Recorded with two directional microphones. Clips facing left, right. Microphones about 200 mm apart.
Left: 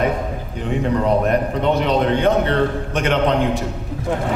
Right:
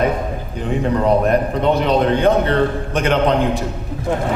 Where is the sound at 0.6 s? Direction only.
35° right (ahead or behind).